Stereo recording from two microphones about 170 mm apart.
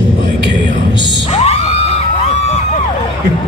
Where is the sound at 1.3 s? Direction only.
35° left (ahead or behind).